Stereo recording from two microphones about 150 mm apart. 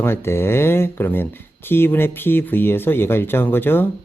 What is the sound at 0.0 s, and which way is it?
Speech, 15° left (ahead or behind).